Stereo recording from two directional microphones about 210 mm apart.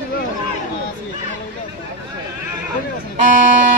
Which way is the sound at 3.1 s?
35° right (ahead or behind).